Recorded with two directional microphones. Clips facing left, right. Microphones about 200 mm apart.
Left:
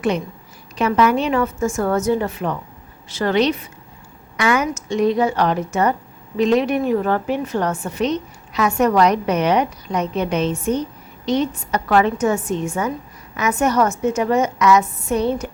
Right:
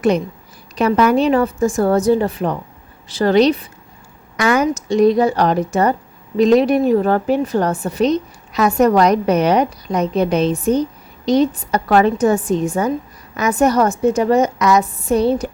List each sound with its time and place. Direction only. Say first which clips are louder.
0.8 s a woman's voice: right 3 dB; 40° right (ahead or behind)